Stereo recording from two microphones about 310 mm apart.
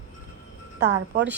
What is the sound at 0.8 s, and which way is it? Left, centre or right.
Speech, right.